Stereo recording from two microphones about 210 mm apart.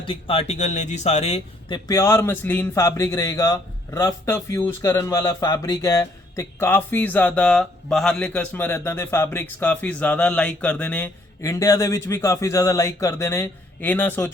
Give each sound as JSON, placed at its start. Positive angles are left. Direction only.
{"t": 0.0, "sound": "speech", "side_deg": 25}
{"t": 1.9, "sound": "a man's voice", "side_deg": 15}